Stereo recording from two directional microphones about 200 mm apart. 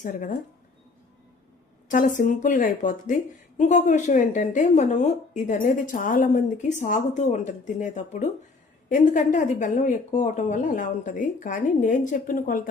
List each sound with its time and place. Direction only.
0.0 s a woman's voice: 40° left (ahead or behind)
1.9 s a woman's voice: 40° left (ahead or behind)